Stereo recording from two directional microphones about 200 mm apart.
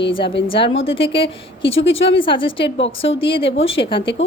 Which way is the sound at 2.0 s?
25° left (ahead or behind).